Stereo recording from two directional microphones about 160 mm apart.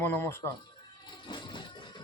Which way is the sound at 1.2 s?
30° left (ahead or behind).